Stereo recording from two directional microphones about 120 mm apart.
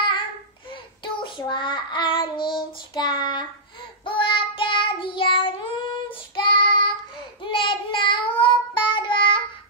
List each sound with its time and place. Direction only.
1.0 s child singing: 40° left (ahead or behind)